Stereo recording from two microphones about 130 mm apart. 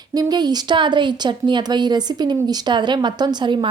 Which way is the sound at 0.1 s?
30° right (ahead or behind).